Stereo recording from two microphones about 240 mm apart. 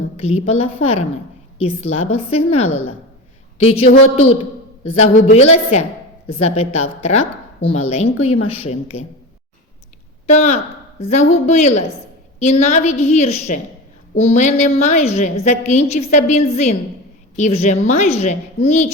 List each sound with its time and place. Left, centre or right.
0.2 s a woman's voice: left
4.0 s a woman's voice: left
4.8 s a woman's voice: left
10.2 s a woman's voice: left